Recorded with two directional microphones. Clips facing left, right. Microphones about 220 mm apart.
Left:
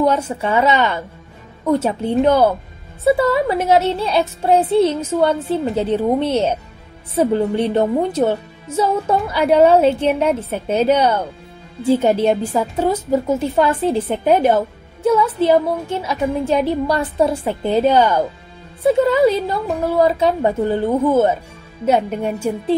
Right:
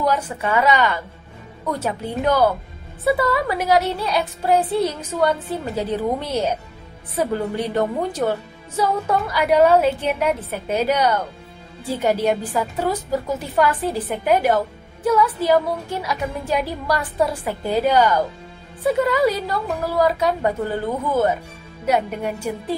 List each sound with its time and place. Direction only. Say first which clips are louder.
0.0 s a woman's voice: left 5 dB; 25° left (ahead or behind)